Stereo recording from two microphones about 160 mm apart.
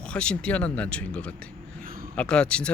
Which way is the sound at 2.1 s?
5° left (ahead or behind).